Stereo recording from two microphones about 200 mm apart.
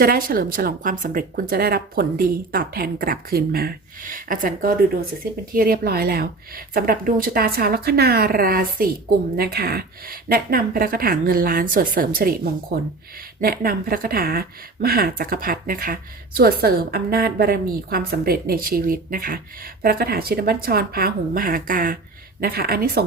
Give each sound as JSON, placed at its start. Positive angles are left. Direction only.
{"t": 0.0, "sound": "speech", "side_deg": -45}
{"t": 13.4, "sound": "speech", "side_deg": -45}